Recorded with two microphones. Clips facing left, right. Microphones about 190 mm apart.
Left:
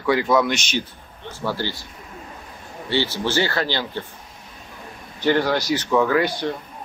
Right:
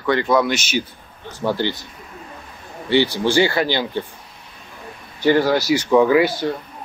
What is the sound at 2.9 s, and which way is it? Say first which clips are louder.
Speech: right 5 dB; 15° right (ahead or behind).